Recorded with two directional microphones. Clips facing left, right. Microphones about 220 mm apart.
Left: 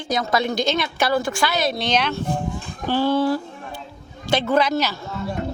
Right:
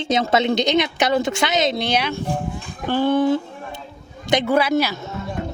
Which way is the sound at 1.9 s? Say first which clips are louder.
Even; 10° right (ahead or behind).